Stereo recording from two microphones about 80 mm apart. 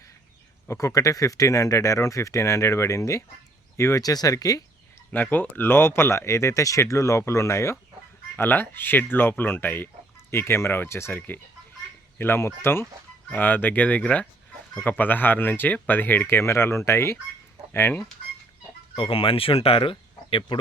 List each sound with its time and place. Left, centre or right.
0.7 s speech: left
4.0 s speech: left
5.1 s speech: left
8.4 s speech: left
19.5 s speech: left
20.5 s speech: left